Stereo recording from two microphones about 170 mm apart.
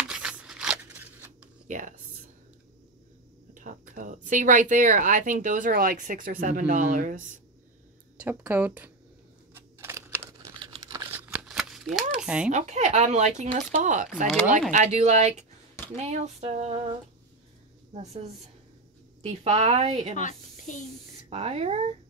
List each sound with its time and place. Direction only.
0.0 s a sound: 5° right (ahead or behind)
1.7 s speech: 50° right (ahead or behind)
3.5 s speech: 50° right (ahead or behind)
8.2 s speech: 10° right (ahead or behind)
9.5 s crunch: 15° right (ahead or behind)
10.6 s crumpling: 25° right (ahead or behind)
11.1 s a sound: 10° right (ahead or behind)
12.4 s a woman's voice: 45° right (ahead or behind)
17.9 s a woman's voice: 40° right (ahead or behind)
20.2 s speech: 50° left (ahead or behind)
21.3 s a woman's voice: 40° right (ahead or behind)